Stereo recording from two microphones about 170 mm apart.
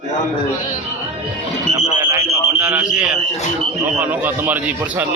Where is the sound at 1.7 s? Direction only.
15° right (ahead or behind).